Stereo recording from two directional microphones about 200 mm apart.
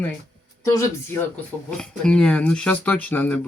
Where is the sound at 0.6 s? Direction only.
15° left (ahead or behind).